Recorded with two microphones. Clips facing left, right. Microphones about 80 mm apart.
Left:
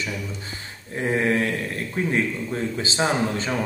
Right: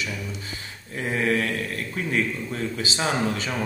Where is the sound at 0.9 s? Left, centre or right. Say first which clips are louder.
Left 2 dB; left.